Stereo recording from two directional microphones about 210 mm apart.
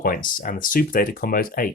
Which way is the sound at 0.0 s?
40° left (ahead or behind).